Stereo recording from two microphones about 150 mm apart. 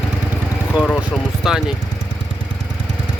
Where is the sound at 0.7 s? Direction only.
10° right (ahead or behind).